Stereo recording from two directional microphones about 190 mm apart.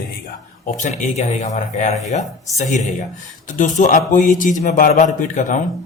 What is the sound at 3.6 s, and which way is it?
Speech, 40° left (ahead or behind).